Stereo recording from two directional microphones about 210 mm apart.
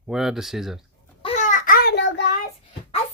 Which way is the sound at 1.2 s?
35° left (ahead or behind).